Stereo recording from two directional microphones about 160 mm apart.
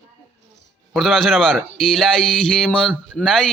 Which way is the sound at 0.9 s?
Centre (ahead or behind).